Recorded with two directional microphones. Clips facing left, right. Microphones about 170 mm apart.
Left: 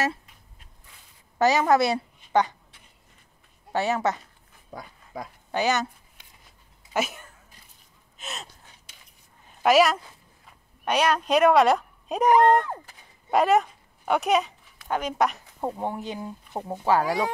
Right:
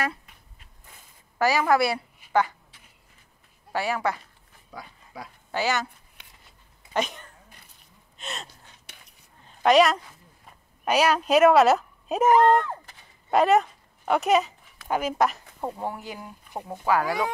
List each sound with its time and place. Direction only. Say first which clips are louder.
1.4 s speech: left 1 dB; 20° left (ahead or behind)
3.7 s speech: left 2 dB; 20° left (ahead or behind)
4.7 s dog: left 3 dB; 45° left (ahead or behind)
5.5 s speech: left 2 dB; 20° left (ahead or behind)
6.9 s speech: even; 5° left (ahead or behind)
8.2 s gasp: right 1 dB; centre (ahead or behind)
8.8 s dishes: right 4 dB; 65° right (ahead or behind)
9.6 s a woman's voice: right 1 dB; 5° left (ahead or behind)
13.3 s speech: right 1 dB; centre (ahead or behind)
15.6 s speech: left 2 dB; 15° left (ahead or behind)